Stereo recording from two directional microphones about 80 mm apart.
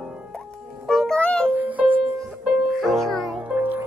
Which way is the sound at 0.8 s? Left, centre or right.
Centre.